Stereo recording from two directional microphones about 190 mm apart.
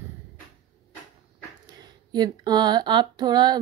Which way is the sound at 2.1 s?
20° right (ahead or behind).